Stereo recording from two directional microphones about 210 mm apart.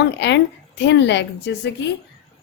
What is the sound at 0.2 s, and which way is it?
A woman's voice, 55° left (ahead or behind).